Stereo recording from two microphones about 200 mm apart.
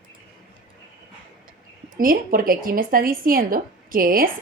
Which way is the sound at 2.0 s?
45° right (ahead or behind).